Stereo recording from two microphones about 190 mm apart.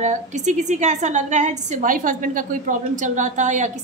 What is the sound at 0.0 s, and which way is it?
A woman's voice, 40° right (ahead or behind).